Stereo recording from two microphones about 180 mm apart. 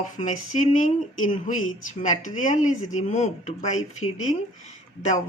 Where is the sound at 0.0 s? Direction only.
45° left (ahead or behind).